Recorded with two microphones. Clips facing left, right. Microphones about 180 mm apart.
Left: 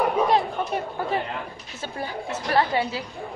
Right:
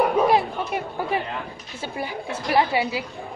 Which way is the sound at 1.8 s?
10° right (ahead or behind).